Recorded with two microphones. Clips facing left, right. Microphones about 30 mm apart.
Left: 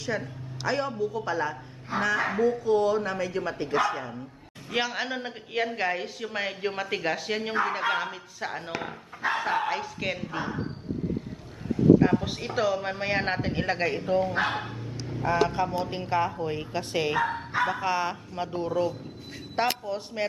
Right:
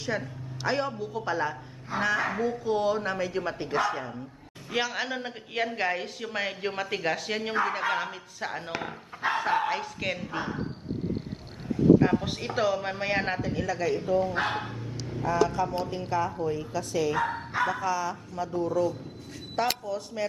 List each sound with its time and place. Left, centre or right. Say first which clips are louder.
0.0 s a man's voice: even; centre
11.8 s a man's voice: left 1 dB; centre
13.4 s a woman's voice: left 2 dB; left
14.3 s dog: left 1 dB; centre
15.2 s a woman's voice: left 1 dB; left
17.2 s speech: left 1 dB; centre
17.7 s speech: left 1 dB; left
19.8 s speech: left 1 dB; left